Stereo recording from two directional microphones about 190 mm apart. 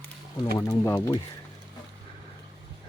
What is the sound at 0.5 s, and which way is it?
Speech, 15° left (ahead or behind).